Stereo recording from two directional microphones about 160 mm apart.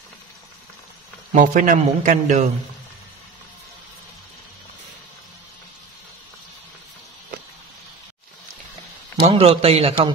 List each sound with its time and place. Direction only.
1.3 s a man's voice: 55° right (ahead or behind)
9.1 s a man's voice: 40° right (ahead or behind)